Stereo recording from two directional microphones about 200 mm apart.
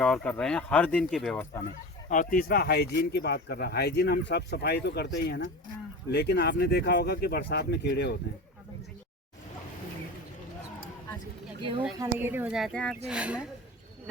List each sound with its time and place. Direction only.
0.0 s speech: 5° left (ahead or behind)
2.0 s speech: 40° left (ahead or behind)
11.9 s speech: 10° right (ahead or behind)